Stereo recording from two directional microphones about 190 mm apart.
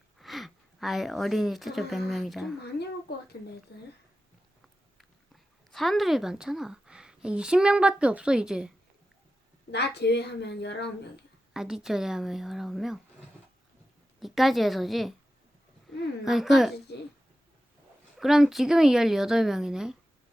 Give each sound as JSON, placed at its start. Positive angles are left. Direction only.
{"t": 0.2, "sound": "speech", "side_deg": 0}
{"t": 3.7, "sound": "a woman's voice", "side_deg": 60}
{"t": 5.7, "sound": "a woman's voice", "side_deg": 0}
{"t": 9.7, "sound": "a woman's voice", "side_deg": 60}
{"t": 11.5, "sound": "a woman's voice", "side_deg": -5}
{"t": 14.2, "sound": "a woman's voice", "side_deg": 0}
{"t": 16.2, "sound": "a woman's voice", "side_deg": 0}
{"t": 18.2, "sound": "a woman's voice", "side_deg": 0}